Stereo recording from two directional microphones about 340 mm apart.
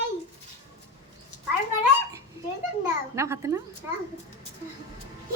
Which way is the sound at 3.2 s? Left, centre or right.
Centre.